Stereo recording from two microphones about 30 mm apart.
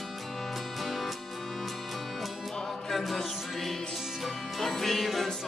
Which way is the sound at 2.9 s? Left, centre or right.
Centre.